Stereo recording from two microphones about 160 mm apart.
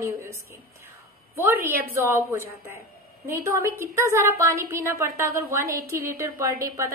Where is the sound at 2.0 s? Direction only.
15° right (ahead or behind).